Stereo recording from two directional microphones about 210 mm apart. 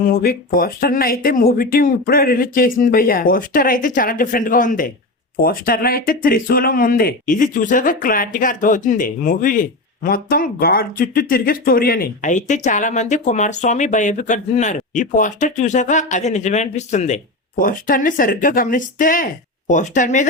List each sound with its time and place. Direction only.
0.1 s speech: 45° left (ahead or behind)